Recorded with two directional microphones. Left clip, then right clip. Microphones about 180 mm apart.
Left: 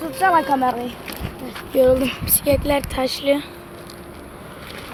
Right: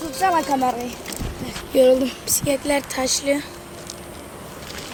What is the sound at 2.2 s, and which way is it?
Speech, 10° left (ahead or behind).